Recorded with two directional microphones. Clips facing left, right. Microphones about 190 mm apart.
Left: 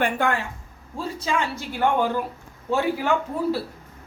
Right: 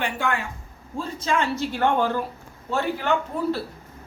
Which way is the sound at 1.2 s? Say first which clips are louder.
Right 3 dB; 10° left (ahead or behind).